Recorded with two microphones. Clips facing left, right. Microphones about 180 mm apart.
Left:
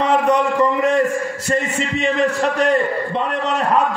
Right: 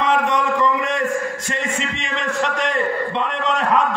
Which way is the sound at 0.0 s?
35° left (ahead or behind).